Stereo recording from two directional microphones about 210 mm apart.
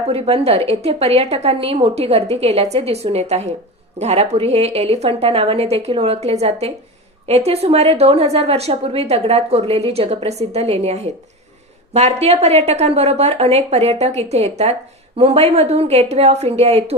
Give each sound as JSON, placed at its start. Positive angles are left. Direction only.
{"t": 0.1, "sound": "a woman's voice", "side_deg": -30}